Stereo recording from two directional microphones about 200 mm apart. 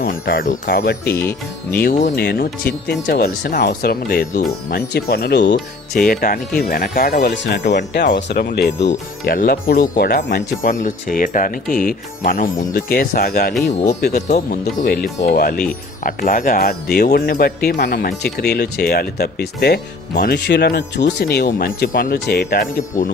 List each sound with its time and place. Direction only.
0.0 s speech: 45° left (ahead or behind)
1.1 s speech: 10° left (ahead or behind)
1.8 s speech: 40° left (ahead or behind)
5.9 s speech: 45° left (ahead or behind)
14.1 s speech: 35° left (ahead or behind)
14.8 s speech: 50° left (ahead or behind)